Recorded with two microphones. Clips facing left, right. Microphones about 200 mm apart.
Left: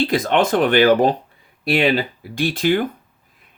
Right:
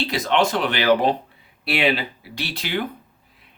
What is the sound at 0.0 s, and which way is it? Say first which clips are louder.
Speech: left 3 dB; 50° left (ahead or behind).